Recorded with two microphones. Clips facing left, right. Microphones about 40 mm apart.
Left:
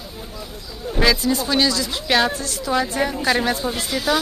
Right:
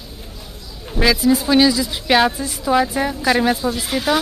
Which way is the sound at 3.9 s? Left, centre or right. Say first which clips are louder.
Right 2 dB; right.